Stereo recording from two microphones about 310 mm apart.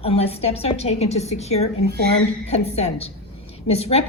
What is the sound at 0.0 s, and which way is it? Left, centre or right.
A woman's voice, centre.